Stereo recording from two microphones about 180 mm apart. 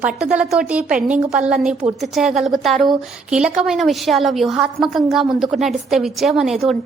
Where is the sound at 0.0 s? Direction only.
5° right (ahead or behind).